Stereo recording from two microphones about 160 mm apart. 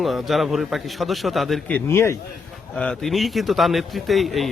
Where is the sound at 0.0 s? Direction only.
Centre (ahead or behind).